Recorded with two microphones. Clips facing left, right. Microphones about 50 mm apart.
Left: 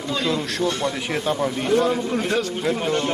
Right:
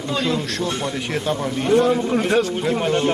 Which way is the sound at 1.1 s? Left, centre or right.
Centre.